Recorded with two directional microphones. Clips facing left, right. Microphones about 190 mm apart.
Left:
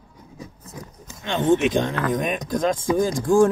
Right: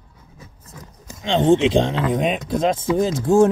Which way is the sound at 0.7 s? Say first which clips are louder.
Left 4 dB; 15° left (ahead or behind).